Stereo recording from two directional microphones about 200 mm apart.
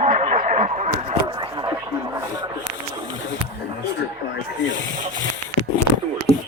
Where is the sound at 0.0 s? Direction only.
35° right (ahead or behind).